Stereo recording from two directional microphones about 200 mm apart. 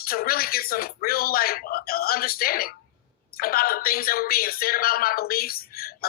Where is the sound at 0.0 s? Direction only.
50° left (ahead or behind).